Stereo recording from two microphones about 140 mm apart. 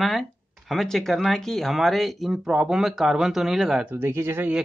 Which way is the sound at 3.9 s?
15° right (ahead or behind).